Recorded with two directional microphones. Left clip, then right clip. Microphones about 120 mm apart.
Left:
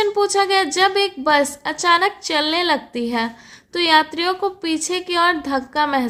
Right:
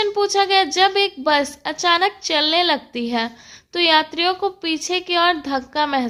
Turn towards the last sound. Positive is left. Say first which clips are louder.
# left 1 dB
turn(degrees=-25)  # may be behind; listen again after turning